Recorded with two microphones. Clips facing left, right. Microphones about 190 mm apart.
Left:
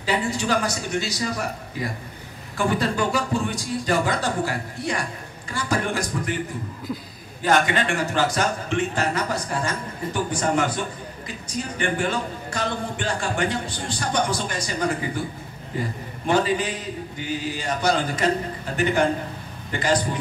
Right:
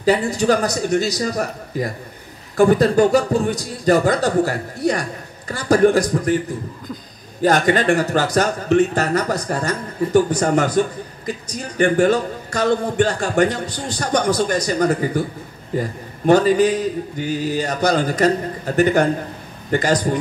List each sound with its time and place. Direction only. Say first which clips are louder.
0.0 s a man's voice: right 8 dB; 40° right (ahead or behind)
7.4 s a man's voice: right 6 dB; 40° right (ahead or behind)
16.3 s a man's voice: right 8 dB; 40° right (ahead or behind)